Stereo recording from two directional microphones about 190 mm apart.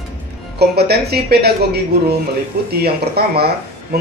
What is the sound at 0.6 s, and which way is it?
Speech, 60° right (ahead or behind).